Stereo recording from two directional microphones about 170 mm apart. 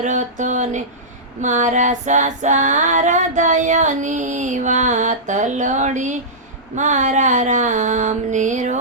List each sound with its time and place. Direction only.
0.0 s female singing: 45° right (ahead or behind)